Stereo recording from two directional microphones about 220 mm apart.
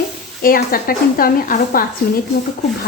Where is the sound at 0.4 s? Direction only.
40° left (ahead or behind).